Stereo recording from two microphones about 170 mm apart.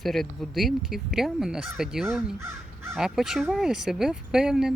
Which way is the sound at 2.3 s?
15° right (ahead or behind).